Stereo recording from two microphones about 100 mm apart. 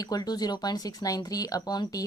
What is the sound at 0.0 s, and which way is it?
Speech, 40° left (ahead or behind).